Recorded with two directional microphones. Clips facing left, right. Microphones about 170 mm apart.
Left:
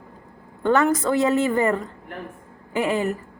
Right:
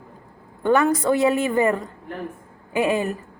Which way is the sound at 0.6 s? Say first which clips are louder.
Right 1 dB; 15° right (ahead or behind).